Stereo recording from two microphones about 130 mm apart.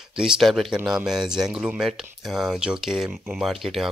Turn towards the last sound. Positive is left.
turn(degrees=0)  # may be behind; listen again after turning